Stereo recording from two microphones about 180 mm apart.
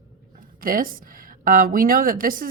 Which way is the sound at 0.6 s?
50° right (ahead or behind).